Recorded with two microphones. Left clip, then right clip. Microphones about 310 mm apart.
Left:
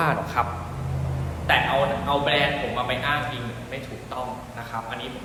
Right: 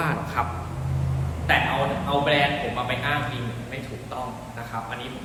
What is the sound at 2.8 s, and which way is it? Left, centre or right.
Speech, centre.